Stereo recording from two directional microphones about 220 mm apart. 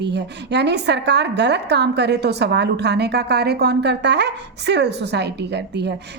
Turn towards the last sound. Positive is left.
turn(degrees=-50)  # may be behind; listen again after turning